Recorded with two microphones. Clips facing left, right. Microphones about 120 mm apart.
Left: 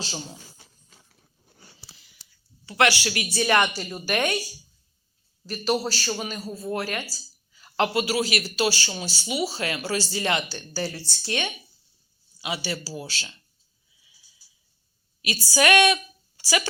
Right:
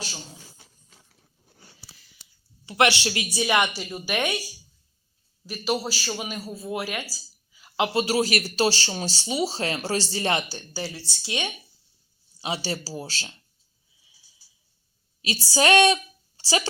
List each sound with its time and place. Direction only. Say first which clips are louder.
2.6 s a woman's voice: right 1 dB; 20° right (ahead or behind)
3.2 s a woman's voice: left 2 dB; 10° right (ahead or behind)
5.5 s speech: left 2 dB; 10° right (ahead or behind)
7.1 s a sound: even; 5° right (ahead or behind)
7.9 s speech: right 2 dB; 35° right (ahead or behind)
10.8 s a woman's voice: left 3 dB; 5° right (ahead or behind)
12.4 s speech: right 1 dB; 35° right (ahead or behind)
15.2 s a woman's voice: even; 30° right (ahead or behind)